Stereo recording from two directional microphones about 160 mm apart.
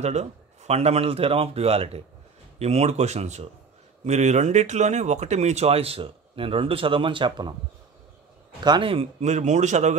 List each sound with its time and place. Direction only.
0.0 s speech: 45° right (ahead or behind); by 7.5 s 30° right (ahead or behind)
8.6 s speech: 30° right (ahead or behind)
9.2 s speech: 45° right (ahead or behind)